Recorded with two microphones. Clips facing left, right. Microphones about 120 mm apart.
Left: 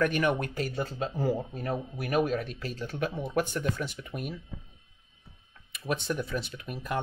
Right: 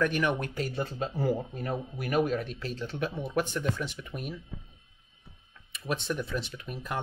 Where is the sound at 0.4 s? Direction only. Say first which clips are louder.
Left 1 dB; 45° left (ahead or behind).